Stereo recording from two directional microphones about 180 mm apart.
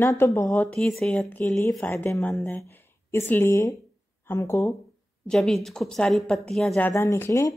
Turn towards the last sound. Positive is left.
turn(degrees=15)  # may be behind; listen again after turning